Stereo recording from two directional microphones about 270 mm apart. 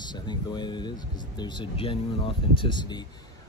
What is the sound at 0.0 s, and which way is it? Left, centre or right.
Speech, centre.